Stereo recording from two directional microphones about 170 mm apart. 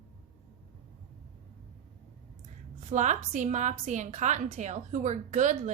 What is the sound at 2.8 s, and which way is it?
A woman's voice, 45° right (ahead or behind).